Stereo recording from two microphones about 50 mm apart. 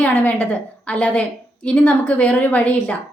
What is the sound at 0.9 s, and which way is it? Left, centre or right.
A woman's voice, left.